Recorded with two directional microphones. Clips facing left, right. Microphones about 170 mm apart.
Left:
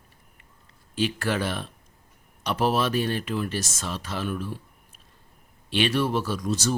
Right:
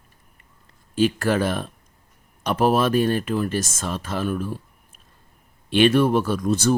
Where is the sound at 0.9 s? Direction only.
45° right (ahead or behind).